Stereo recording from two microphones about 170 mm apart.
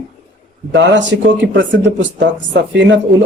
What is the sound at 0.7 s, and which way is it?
Speech, 90° right.